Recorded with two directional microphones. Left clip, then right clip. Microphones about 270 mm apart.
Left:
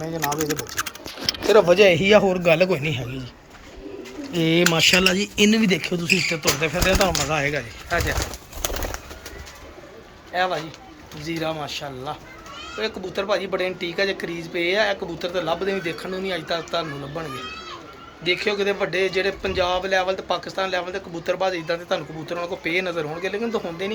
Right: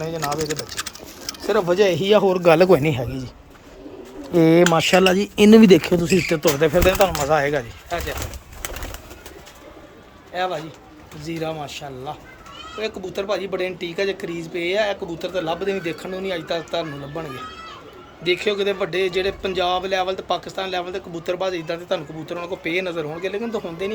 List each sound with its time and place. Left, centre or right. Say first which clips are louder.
1.5 s a man's voice: left 3 dB; centre
4.4 s speech: right 4 dB; centre
7.9 s speech: left 3 dB; centre
10.3 s a man's voice: left 2 dB; centre